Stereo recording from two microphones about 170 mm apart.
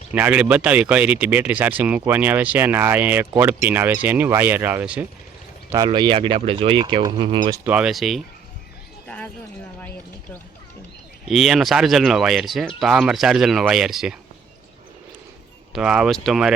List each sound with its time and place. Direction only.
0.1 s speech: 10° right (ahead or behind)
5.7 s speech: 25° right (ahead or behind)
7.6 s speech: 5° right (ahead or behind)
11.3 s speech: centre (ahead or behind)
15.7 s speech: 5° right (ahead or behind)